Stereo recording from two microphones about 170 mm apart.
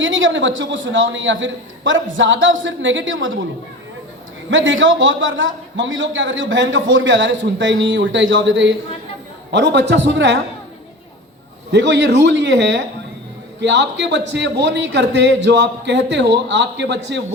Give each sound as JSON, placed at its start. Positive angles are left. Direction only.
{"t": 0.0, "sound": "a man's voice", "side_deg": -90}
{"t": 4.5, "sound": "a man's voice", "side_deg": -90}
{"t": 11.7, "sound": "a man's voice", "side_deg": -90}